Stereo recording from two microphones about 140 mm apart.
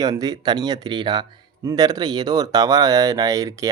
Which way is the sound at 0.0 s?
25° right (ahead or behind).